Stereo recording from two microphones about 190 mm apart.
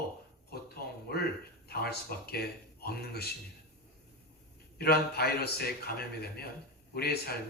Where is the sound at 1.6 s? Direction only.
55° left (ahead or behind).